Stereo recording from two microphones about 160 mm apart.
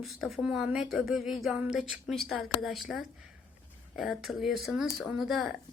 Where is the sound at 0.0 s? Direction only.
Centre (ahead or behind).